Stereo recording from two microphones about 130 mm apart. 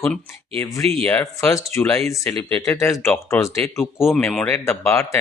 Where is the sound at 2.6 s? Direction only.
25° left (ahead or behind).